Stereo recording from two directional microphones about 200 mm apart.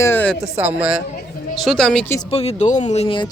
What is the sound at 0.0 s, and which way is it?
Speech, 10° left (ahead or behind).